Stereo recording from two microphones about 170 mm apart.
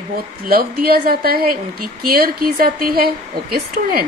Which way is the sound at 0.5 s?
65° right (ahead or behind).